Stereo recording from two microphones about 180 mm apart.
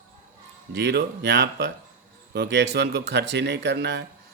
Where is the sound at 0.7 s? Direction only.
70° right (ahead or behind).